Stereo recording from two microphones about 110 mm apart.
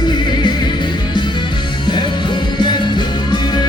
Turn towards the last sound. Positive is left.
turn(degrees=45)  # may be behind; listen again after turning